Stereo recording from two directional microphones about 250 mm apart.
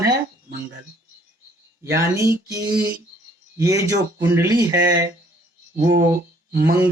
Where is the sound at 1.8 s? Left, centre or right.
Centre.